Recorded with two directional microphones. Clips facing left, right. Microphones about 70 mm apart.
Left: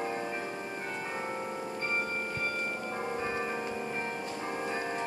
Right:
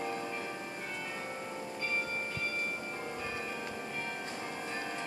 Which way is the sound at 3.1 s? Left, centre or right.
Left.